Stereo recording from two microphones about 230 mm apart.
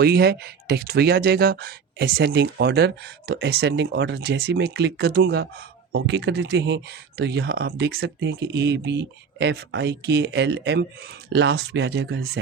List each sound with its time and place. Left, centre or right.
0.0 s speech: right